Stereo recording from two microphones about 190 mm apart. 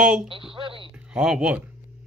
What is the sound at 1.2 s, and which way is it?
Speech, 5° right (ahead or behind).